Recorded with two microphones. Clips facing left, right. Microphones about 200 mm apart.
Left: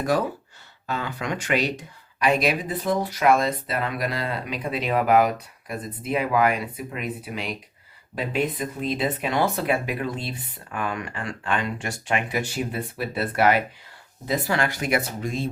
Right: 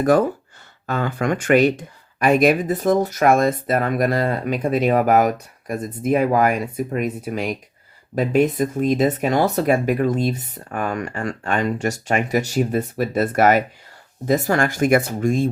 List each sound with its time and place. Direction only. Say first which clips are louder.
0.0 s speech: right 7 dB; 50° right (ahead or behind)